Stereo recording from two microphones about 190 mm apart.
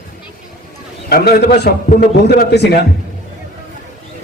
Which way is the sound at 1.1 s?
55° left (ahead or behind).